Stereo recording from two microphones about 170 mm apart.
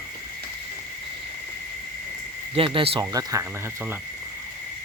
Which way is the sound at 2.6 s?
30° right (ahead or behind).